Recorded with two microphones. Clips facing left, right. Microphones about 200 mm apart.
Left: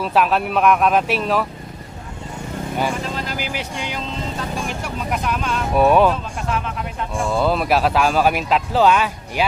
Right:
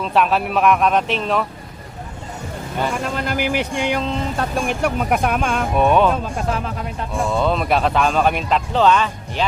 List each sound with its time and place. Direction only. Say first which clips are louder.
0.0 s speech: even; centre (ahead or behind)
3.2 s speech: right 6 dB; 55° right (ahead or behind)
5.7 s speech: left 2 dB; 5° left (ahead or behind)
6.3 s speech: right 2 dB; 35° right (ahead or behind)
7.3 s speech: left 1 dB; 5° left (ahead or behind)